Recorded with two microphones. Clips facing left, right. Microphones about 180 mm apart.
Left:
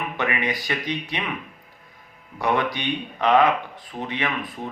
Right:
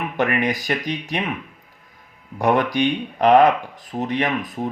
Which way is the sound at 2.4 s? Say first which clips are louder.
Right 5 dB; 45° right (ahead or behind).